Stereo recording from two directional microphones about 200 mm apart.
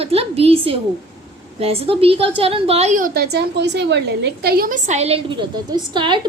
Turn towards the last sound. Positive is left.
turn(degrees=-25)  # may be behind; listen again after turning